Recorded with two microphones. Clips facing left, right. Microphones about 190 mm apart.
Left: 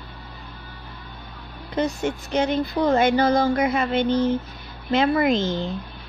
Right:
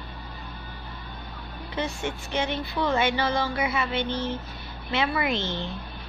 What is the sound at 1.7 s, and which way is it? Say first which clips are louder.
Speech: left 7 dB; 40° left (ahead or behind).